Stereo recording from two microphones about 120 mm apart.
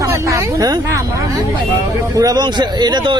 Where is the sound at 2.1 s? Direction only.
30° right (ahead or behind).